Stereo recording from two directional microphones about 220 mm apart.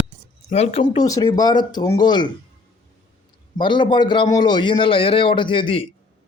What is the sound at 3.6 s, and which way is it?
Speech, 20° left (ahead or behind).